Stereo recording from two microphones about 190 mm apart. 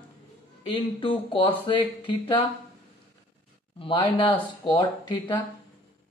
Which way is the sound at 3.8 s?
25° left (ahead or behind).